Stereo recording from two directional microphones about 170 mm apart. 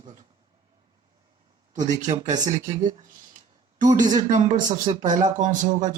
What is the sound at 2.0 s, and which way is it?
Speech, 45° right (ahead or behind).